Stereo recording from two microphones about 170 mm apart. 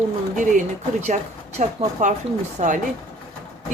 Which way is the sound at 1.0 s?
40° right (ahead or behind).